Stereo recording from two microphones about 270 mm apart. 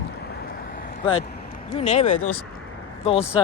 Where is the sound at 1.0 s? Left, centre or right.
Left.